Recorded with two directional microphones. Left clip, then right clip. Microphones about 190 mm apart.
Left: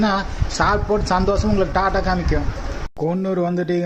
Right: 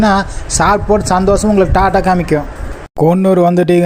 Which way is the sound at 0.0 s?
35° right (ahead or behind).